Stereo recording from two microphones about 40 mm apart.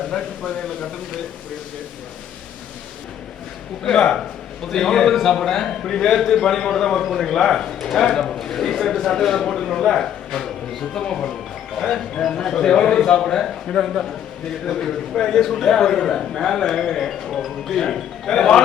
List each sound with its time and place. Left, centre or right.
0.1 s speech: left
3.8 s a man's voice: centre
11.8 s a man's voice: centre